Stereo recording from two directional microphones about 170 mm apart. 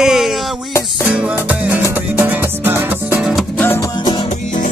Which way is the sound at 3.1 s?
Centre (ahead or behind).